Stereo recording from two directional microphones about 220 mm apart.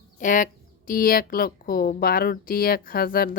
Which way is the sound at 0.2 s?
35° left (ahead or behind).